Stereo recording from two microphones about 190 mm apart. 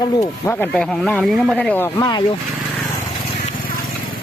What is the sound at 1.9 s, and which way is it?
Speech, 20° left (ahead or behind).